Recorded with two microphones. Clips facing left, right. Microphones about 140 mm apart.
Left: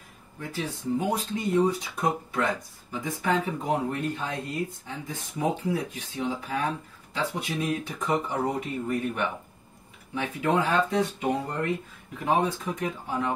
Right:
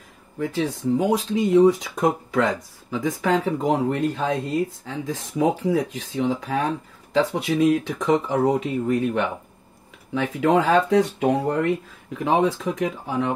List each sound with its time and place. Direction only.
0.4 s speech: 90° right; by 11.7 s 75° right (ahead or behind)
12.3 s speech: 90° right